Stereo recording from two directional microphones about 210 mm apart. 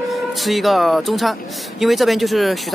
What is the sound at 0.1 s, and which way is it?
Speech, centre (ahead or behind).